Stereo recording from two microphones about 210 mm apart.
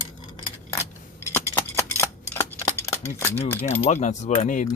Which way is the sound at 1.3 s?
10° left (ahead or behind).